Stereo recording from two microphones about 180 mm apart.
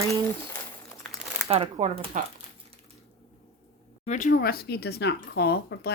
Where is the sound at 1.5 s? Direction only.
35° right (ahead or behind).